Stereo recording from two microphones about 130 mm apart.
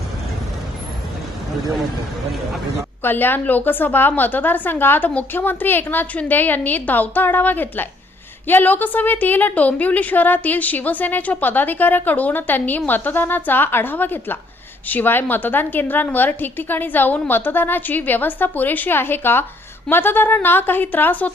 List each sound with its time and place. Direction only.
3.0 s a woman's voice: 15° left (ahead or behind)